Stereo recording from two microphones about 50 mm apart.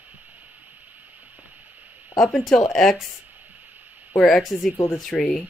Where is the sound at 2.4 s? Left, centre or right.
Centre.